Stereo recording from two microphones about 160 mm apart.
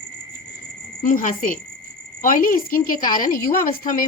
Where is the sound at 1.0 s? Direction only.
55° left (ahead or behind).